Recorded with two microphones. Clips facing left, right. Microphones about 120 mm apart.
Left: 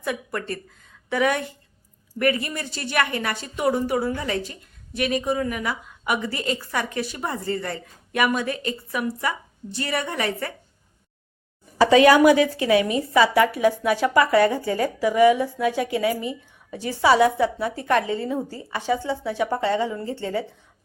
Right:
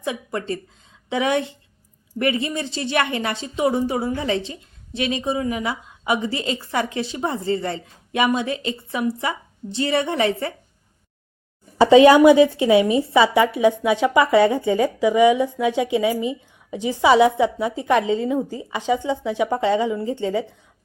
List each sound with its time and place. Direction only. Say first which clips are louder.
0.0 s a woman's voice: right 2 dB; 20° right (ahead or behind)
11.8 s a woman's voice: right 4 dB; 25° right (ahead or behind)